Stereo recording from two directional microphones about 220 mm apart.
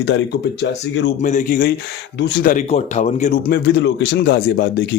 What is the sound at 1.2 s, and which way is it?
Speech, 35° left (ahead or behind).